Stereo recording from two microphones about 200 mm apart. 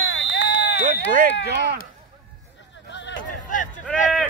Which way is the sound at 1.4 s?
50° right (ahead or behind).